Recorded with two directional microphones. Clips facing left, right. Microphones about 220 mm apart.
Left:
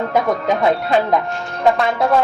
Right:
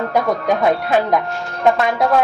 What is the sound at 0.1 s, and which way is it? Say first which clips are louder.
A woman's voice: even; centre (ahead or behind).